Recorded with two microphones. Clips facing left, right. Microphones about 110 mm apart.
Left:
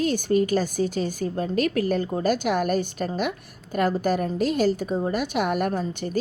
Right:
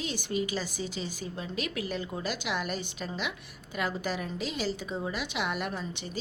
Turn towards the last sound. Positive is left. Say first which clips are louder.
# left 10 dB
turn(degrees=50)  # may be behind; listen again after turning